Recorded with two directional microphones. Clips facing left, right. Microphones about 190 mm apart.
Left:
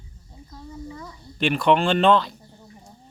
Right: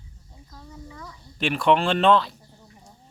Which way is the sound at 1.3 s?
Centre (ahead or behind).